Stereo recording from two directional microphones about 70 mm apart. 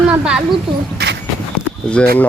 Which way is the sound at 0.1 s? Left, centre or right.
Centre.